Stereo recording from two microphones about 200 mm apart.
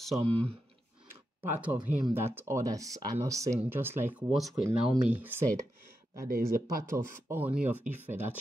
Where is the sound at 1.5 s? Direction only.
10° right (ahead or behind).